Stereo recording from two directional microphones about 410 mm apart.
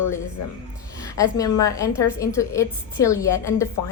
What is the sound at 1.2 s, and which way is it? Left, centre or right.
A woman's voice, centre.